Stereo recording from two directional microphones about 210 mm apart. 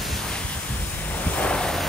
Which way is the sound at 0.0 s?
Centre (ahead or behind).